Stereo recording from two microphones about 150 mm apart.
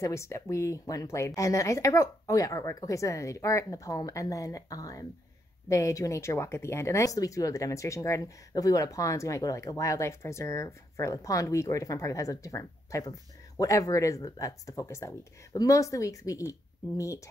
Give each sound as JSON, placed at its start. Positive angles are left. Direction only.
{"t": 0.0, "sound": "speech", "side_deg": 20}